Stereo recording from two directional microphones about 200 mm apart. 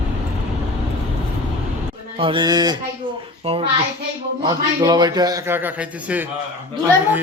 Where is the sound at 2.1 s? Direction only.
25° right (ahead or behind); by 6.2 s 10° right (ahead or behind).